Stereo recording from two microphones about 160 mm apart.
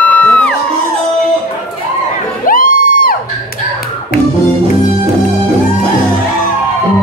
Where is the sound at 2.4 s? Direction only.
60° left (ahead or behind).